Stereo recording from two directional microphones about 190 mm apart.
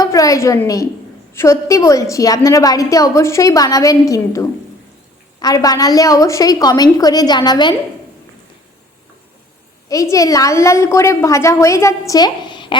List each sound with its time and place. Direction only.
0.0 s a woman's voice: 20° left (ahead or behind)
9.9 s a woman's voice: 15° left (ahead or behind)